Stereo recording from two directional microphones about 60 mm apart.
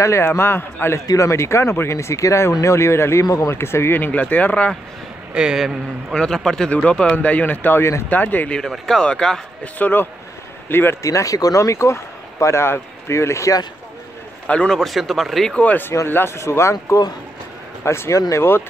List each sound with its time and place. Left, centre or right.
0.0 s a man's voice: left
1.0 s speech: left
4.0 s speech: left
5.3 s a man's voice: centre
6.1 s speech: centre; by 8.5 s left
8.5 s speech: centre
9.8 s a man's voice: left
11.0 s speech: left
14.7 s speech: centre
15.5 s speech: left
16.1 s a man's voice: left
16.3 s speech: left